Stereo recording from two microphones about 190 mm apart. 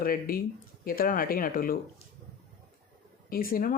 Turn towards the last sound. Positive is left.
turn(degrees=50)  # may be behind; listen again after turning